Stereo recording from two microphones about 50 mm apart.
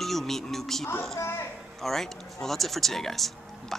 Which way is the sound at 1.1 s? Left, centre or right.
Left.